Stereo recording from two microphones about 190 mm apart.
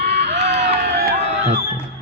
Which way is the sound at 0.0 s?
65° right (ahead or behind).